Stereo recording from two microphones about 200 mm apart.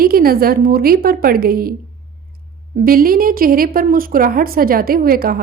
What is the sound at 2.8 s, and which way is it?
A woman's voice, 45° right (ahead or behind).